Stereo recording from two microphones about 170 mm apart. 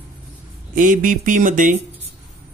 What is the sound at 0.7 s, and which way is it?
Speech, 50° right (ahead or behind).